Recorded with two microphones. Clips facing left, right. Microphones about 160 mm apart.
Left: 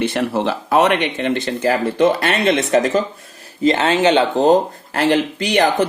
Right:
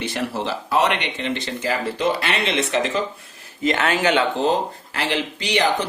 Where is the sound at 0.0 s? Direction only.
60° left (ahead or behind).